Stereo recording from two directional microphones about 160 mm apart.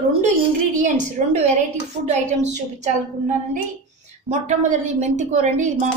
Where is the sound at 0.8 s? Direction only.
50° right (ahead or behind).